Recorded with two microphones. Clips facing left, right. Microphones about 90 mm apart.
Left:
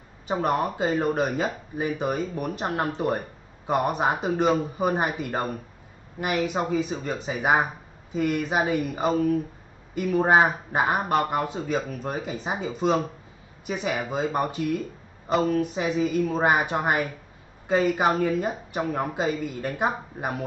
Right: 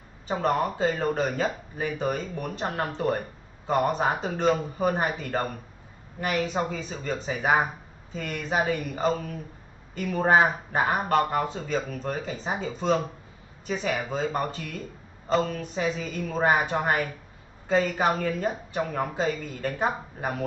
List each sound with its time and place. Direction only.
0.3 s speech: 15° left (ahead or behind)